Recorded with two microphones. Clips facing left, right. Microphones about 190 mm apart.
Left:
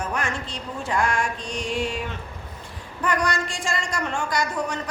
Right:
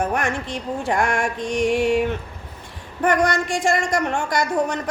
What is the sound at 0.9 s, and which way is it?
Speech, 50° right (ahead or behind).